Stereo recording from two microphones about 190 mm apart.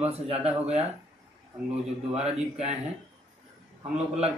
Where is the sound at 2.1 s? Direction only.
35° right (ahead or behind).